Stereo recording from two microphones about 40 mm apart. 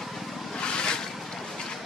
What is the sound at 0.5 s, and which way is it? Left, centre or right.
Vehicle, left.